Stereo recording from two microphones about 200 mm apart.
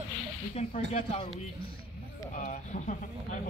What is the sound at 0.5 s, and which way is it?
Speech, 30° left (ahead or behind).